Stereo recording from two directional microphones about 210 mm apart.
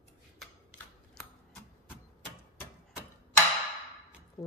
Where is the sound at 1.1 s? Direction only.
5° left (ahead or behind).